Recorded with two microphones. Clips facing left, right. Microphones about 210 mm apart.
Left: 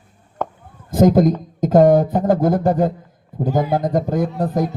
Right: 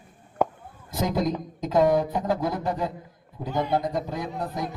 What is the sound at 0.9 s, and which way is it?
A man's voice, 50° left (ahead or behind).